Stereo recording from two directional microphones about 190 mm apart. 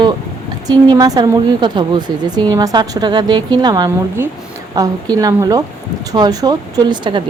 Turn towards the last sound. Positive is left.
turn(degrees=-25)  # may be behind; listen again after turning